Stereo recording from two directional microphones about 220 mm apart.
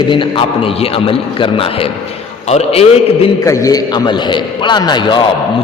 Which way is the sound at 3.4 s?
15° left (ahead or behind).